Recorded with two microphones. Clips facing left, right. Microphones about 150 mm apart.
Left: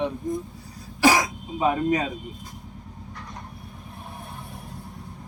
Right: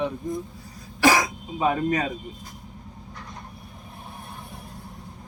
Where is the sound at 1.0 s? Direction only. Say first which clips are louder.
Even; 10° left (ahead or behind).